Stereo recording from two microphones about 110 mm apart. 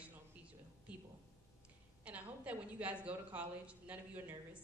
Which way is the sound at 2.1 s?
15° right (ahead or behind).